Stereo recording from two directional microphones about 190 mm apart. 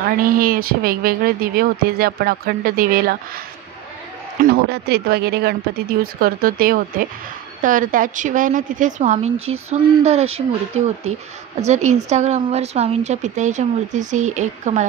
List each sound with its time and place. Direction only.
0.2 s speech: 50° right (ahead or behind)
4.4 s a woman's voice: 55° right (ahead or behind); by 10.4 s 35° right (ahead or behind)
11.6 s a woman's voice: 35° right (ahead or behind)